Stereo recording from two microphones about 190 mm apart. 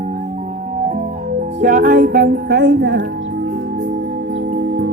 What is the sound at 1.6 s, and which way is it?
Music, 45° right (ahead or behind).